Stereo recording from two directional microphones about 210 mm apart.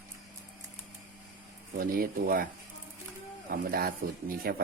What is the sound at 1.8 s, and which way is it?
Speech, 45° right (ahead or behind).